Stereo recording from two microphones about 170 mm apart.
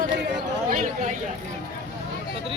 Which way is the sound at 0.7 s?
45° right (ahead or behind).